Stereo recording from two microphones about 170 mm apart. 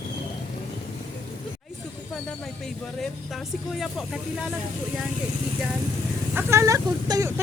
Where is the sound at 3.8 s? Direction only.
Centre (ahead or behind).